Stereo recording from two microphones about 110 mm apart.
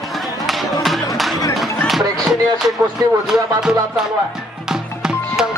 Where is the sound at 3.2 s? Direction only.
5° right (ahead or behind).